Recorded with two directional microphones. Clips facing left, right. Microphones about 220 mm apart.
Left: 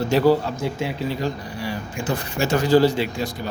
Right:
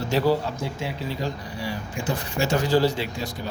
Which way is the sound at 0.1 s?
60° left (ahead or behind).